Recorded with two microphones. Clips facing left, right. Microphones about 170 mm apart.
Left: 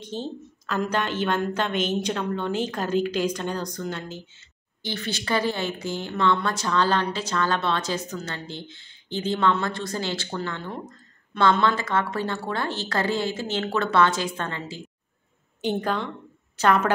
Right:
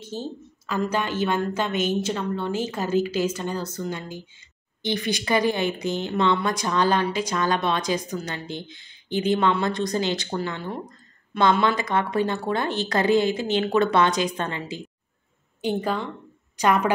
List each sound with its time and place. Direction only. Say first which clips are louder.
0.0 s a woman's voice: even; 10° right (ahead or behind)